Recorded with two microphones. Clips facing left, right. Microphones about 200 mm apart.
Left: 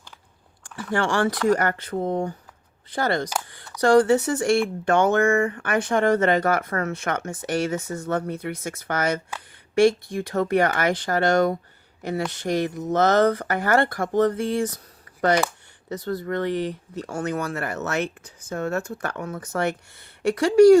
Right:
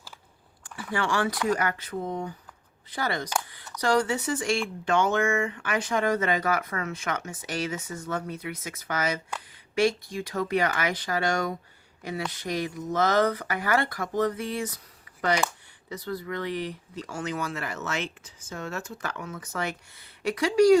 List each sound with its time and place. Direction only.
0.9 s speech: 50° left (ahead or behind)
15.9 s speech: 65° left (ahead or behind)